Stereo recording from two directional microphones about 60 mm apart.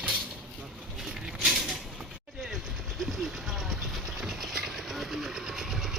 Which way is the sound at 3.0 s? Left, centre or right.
Centre.